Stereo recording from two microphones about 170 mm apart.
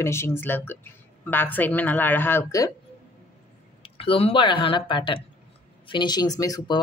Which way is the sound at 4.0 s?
35° left (ahead or behind).